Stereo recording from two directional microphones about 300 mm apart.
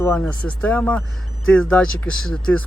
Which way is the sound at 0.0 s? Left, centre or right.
Centre.